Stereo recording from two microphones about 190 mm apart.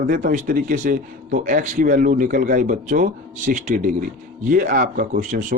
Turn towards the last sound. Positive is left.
turn(degrees=-40)  # may be behind; listen again after turning